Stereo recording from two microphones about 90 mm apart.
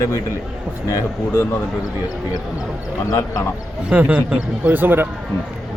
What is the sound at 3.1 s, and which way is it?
Speech, 40° left (ahead or behind).